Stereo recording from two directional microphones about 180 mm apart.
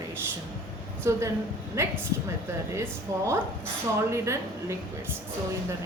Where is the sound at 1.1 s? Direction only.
15° right (ahead or behind).